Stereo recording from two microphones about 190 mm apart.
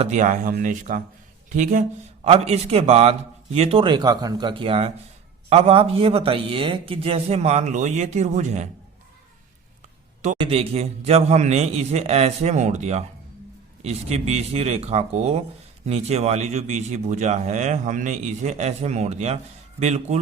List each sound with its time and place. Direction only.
0.0 s speech: 40° right (ahead or behind)
10.3 s speech: 30° right (ahead or behind)